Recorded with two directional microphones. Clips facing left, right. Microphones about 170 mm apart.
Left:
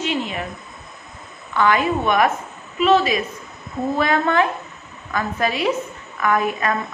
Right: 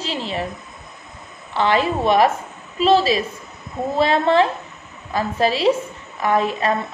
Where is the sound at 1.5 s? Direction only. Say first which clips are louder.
Even; 30° right (ahead or behind).